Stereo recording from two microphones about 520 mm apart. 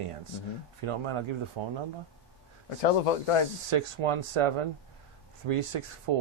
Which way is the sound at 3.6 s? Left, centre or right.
Right.